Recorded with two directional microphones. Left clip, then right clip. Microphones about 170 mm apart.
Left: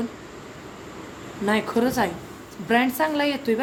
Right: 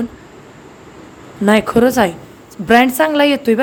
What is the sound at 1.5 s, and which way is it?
A woman's voice, 60° right (ahead or behind).